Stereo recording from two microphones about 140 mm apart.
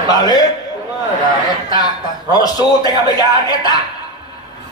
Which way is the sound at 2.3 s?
30° left (ahead or behind).